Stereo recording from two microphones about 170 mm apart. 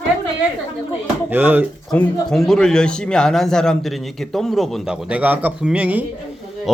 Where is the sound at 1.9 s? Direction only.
5° left (ahead or behind).